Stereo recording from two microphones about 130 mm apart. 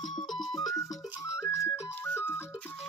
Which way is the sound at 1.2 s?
20° left (ahead or behind).